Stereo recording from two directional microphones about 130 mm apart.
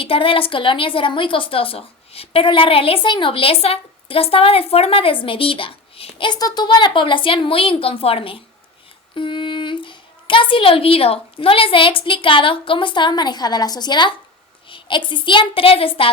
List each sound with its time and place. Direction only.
0.0 s a woman's voice: 45° left (ahead or behind)